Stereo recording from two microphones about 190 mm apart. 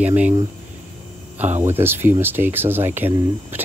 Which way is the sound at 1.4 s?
10° right (ahead or behind).